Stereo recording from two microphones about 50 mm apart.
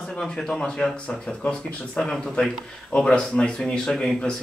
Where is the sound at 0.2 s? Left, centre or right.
Centre.